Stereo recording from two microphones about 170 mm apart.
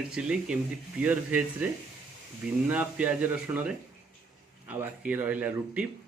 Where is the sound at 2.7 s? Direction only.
10° right (ahead or behind).